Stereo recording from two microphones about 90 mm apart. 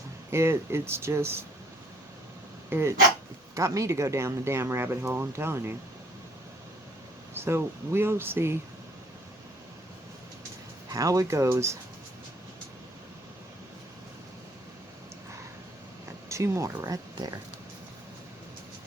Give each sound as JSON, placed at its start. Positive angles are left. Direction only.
{"t": 0.3, "sound": "speech", "side_deg": -30}
{"t": 2.6, "sound": "speech", "side_deg": -25}
{"t": 7.3, "sound": "speech", "side_deg": -30}
{"t": 10.9, "sound": "speech", "side_deg": -40}
{"t": 16.0, "sound": "a sound", "side_deg": -35}
{"t": 16.8, "sound": "speech", "side_deg": -45}